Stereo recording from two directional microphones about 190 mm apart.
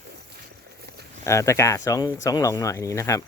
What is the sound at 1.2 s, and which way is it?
Speech, 15° left (ahead or behind).